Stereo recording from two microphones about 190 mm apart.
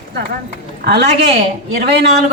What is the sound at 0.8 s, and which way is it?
A woman's voice, 60° right (ahead or behind).